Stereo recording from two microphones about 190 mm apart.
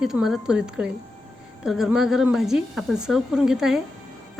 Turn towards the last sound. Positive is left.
turn(degrees=-5)  # may be behind; listen again after turning